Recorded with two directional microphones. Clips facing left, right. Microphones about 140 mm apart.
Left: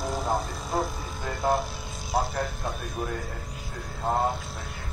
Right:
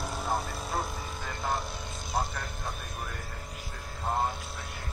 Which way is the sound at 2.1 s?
40° left (ahead or behind).